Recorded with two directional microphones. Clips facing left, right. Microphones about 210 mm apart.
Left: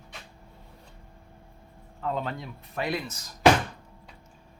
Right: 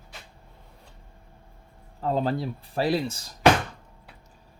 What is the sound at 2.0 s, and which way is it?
Speech, 35° right (ahead or behind).